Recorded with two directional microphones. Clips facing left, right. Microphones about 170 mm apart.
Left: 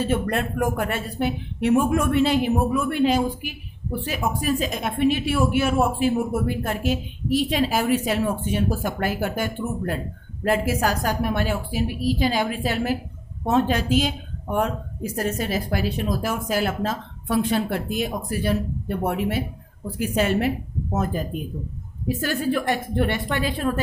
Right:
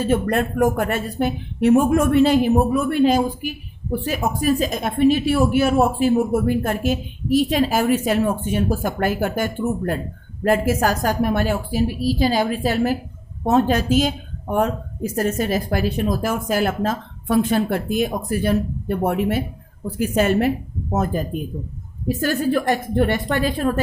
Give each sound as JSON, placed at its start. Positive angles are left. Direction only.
{"t": 0.0, "sound": "a woman's voice", "side_deg": -45}